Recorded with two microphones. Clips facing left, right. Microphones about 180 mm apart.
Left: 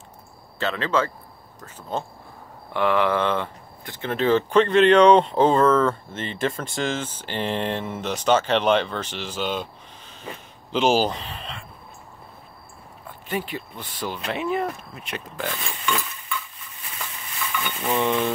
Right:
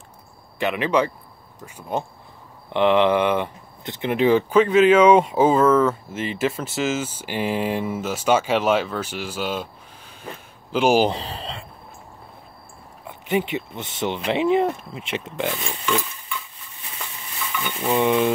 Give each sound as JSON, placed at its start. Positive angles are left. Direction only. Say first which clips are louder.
{"t": 0.6, "sound": "speech", "louder": "right 3 dB", "side_deg": -15}
{"t": 10.2, "sound": "a sound", "louder": "even", "side_deg": -10}
{"t": 11.1, "sound": "speech", "louder": "right 4 dB", "side_deg": -35}
{"t": 13.0, "sound": "speech", "louder": "right 6 dB", "side_deg": -20}
{"t": 17.9, "sound": "speech", "louder": "right 4 dB", "side_deg": -15}